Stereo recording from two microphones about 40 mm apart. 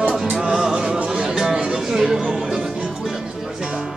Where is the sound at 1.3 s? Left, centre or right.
Centre.